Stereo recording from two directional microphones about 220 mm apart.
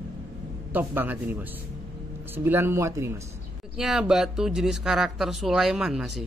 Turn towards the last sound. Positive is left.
turn(degrees=0)  # may be behind; listen again after turning